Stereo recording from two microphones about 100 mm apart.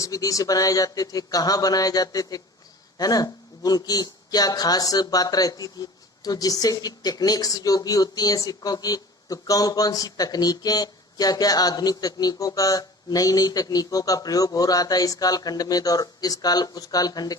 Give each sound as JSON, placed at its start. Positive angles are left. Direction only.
{"t": 0.0, "sound": "speech", "side_deg": 35}